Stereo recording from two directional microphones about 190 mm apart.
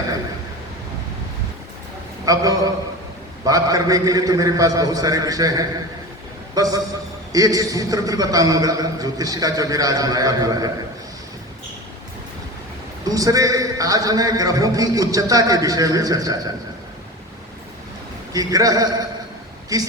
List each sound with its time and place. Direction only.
2.2 s a man's voice: 20° right (ahead or behind)
13.1 s a man's voice: 20° right (ahead or behind)
18.3 s a man's voice: 20° right (ahead or behind)